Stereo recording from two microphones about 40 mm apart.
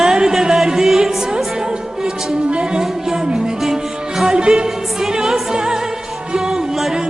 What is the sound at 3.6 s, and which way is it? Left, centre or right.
Music, centre.